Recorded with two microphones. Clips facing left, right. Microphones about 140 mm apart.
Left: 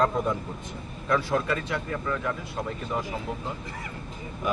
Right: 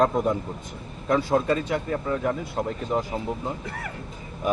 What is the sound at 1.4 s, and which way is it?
Speech, 40° right (ahead or behind).